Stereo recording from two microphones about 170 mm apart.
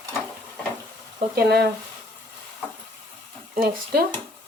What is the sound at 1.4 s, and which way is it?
Speech, 65° right (ahead or behind).